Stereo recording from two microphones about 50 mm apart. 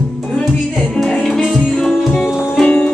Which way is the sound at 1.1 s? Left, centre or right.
Centre.